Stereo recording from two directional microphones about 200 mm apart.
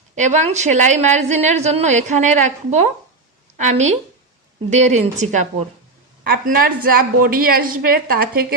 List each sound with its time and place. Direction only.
0.2 s a woman's voice: 35° right (ahead or behind)